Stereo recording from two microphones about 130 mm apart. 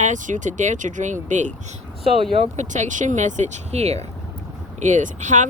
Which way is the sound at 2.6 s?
65° right (ahead or behind).